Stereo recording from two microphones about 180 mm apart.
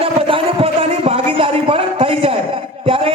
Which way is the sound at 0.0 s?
30° right (ahead or behind).